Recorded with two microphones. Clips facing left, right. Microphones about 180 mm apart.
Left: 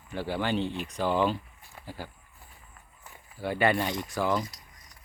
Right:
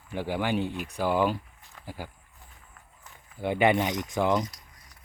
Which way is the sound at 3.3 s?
20° right (ahead or behind).